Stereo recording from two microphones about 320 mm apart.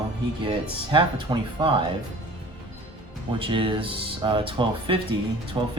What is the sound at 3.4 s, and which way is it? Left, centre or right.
Speech, centre.